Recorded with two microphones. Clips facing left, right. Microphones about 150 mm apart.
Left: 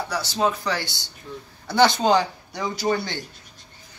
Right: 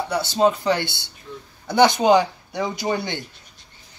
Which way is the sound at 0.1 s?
25° right (ahead or behind).